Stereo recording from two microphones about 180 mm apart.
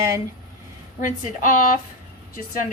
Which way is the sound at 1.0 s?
45° left (ahead or behind).